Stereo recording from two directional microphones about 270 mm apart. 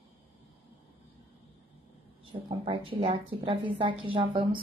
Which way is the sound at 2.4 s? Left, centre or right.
Centre.